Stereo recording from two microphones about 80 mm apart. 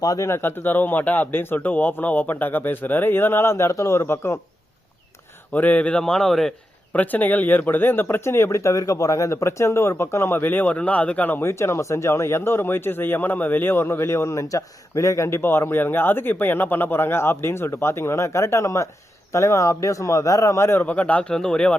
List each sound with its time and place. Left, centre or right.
0.0 s speech: left
0.3 s speech: left
5.5 s speech: centre
6.9 s speech: left
20.8 s speech: centre